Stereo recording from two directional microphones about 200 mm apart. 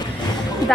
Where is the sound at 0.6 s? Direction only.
20° left (ahead or behind).